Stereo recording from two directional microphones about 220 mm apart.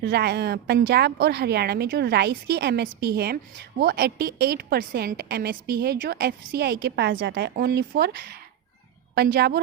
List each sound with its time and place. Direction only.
0.0 s a woman's voice: 50° right (ahead or behind)